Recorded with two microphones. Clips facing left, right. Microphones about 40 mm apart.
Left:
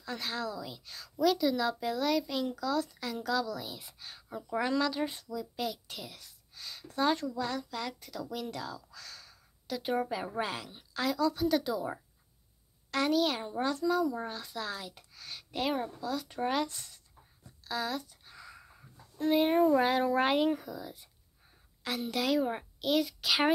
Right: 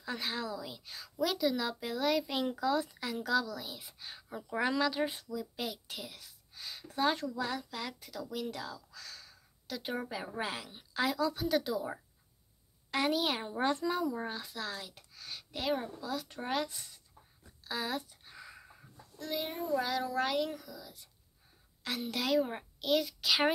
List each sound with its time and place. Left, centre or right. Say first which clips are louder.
0.0 s a woman's voice: left 1 dB; centre
2.3 s a child's voice: even; right; by 12.0 s centre
12.9 s a woman's voice: left 3 dB; centre
13.7 s speech: left 3 dB; right
14.0 s a woman's voice: left 1 dB; centre
17.6 s a sound: left 2 dB; centre
19.1 s a child's voice: left 12 dB; left
21.8 s a child's voice: left 3 dB; centre